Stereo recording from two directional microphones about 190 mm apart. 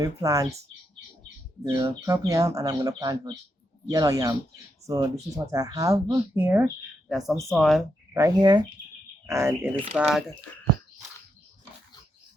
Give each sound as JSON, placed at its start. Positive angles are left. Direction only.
{"t": 0.0, "sound": "speech", "side_deg": -15}
{"t": 1.7, "sound": "speech", "side_deg": -15}
{"t": 8.1, "sound": "speech", "side_deg": -20}